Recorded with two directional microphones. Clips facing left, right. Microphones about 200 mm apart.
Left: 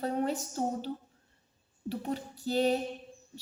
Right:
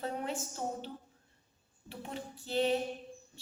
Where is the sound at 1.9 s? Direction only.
40° left (ahead or behind).